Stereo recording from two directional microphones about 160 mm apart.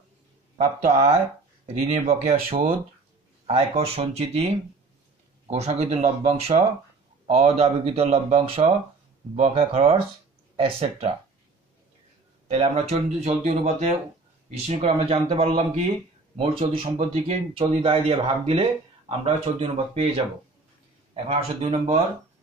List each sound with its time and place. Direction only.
0.6 s speech: 45° right (ahead or behind)
12.4 s speech: 45° right (ahead or behind)
21.1 s speech: 40° right (ahead or behind)